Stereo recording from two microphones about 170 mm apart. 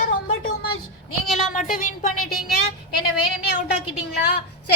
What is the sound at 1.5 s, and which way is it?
Speech, 50° left (ahead or behind).